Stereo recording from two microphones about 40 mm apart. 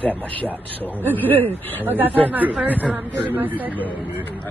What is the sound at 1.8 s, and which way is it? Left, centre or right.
Speech, right.